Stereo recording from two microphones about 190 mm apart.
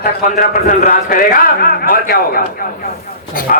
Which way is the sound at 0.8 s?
45° left (ahead or behind).